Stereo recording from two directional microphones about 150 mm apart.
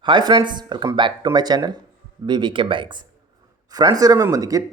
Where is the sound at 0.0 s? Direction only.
30° right (ahead or behind).